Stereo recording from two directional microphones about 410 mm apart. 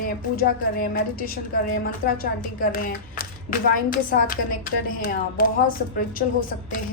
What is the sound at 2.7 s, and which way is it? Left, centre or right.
A woman's voice, left.